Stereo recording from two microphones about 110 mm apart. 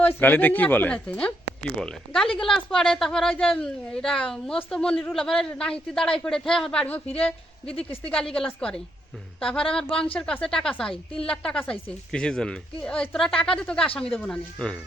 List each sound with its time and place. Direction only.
0.0 s speech: 15° left (ahead or behind)
7.8 s speech: 60° left (ahead or behind)
8.1 s speech: 5° left (ahead or behind)